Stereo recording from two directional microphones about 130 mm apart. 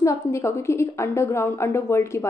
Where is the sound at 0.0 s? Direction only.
25° left (ahead or behind).